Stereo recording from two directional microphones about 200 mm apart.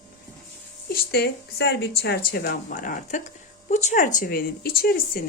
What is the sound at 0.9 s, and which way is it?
Speech, 55° left (ahead or behind).